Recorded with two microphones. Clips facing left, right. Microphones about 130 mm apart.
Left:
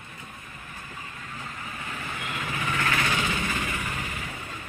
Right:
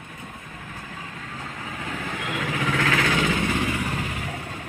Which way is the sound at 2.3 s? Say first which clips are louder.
Right 5 dB; 90° right.